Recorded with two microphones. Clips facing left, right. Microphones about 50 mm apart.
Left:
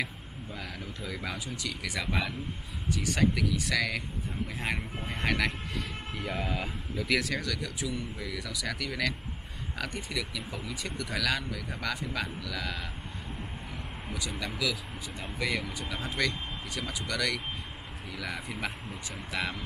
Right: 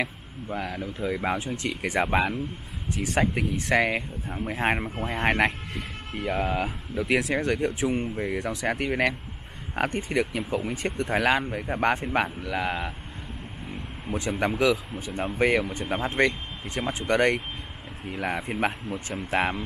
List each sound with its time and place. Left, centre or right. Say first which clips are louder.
0.6 s speech: right 10 dB; right
6.1 s speech: right 8 dB; right
14.5 s speech: right 10 dB; right